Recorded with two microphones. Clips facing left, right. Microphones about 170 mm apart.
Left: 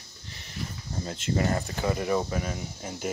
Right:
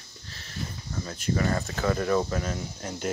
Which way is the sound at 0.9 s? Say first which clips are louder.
Even; 30° left (ahead or behind).